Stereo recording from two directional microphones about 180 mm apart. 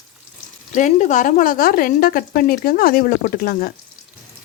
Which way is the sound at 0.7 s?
40° left (ahead or behind).